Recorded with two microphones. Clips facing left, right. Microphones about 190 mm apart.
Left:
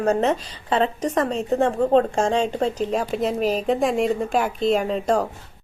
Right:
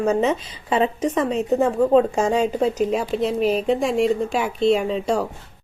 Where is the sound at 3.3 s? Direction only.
40° left (ahead or behind).